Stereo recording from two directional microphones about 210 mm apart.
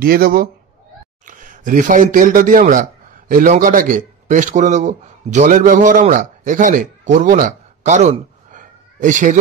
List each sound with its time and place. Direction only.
0.0 s a man's voice: 45° right (ahead or behind)